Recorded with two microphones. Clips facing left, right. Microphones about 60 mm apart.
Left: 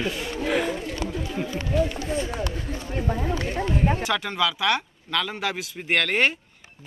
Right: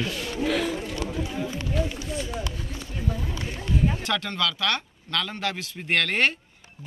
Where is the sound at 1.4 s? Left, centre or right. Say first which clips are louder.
Left 2 dB; left.